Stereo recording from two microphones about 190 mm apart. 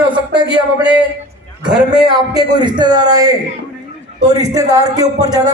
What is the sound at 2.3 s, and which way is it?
A man's voice, 20° right (ahead or behind).